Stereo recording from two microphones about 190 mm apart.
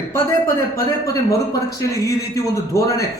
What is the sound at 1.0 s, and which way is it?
A man's voice, 15° left (ahead or behind).